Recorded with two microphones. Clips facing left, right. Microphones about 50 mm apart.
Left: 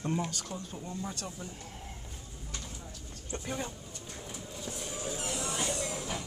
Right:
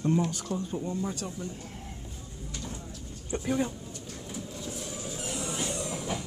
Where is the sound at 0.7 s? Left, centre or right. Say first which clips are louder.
Right 7 dB; centre.